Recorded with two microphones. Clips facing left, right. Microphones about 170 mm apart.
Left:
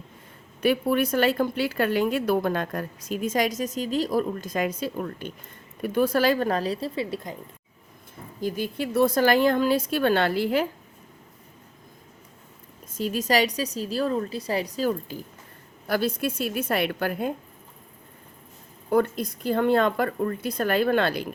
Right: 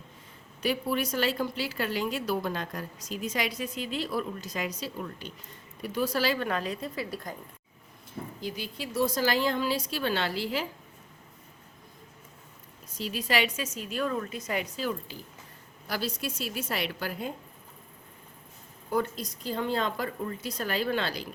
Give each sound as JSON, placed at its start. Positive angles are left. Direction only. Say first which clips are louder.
{"t": 0.6, "sound": "a woman's voice", "louder": "left 7 dB", "side_deg": 55}
{"t": 8.4, "sound": "a woman's voice", "louder": "left 11 dB", "side_deg": 50}
{"t": 12.9, "sound": "a woman's voice", "louder": "left 6 dB", "side_deg": 45}
{"t": 18.9, "sound": "speech", "louder": "left 7 dB", "side_deg": 55}